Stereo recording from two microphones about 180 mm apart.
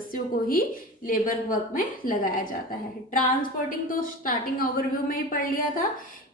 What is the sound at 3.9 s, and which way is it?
A woman's voice, 50° left (ahead or behind).